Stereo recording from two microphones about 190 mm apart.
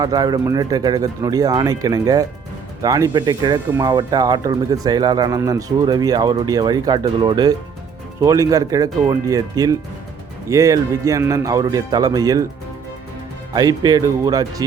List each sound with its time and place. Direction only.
0.0 s speech: 20° right (ahead or behind)
13.5 s speech: 20° right (ahead or behind)